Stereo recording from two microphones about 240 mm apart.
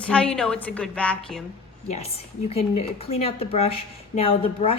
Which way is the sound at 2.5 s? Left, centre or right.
Left.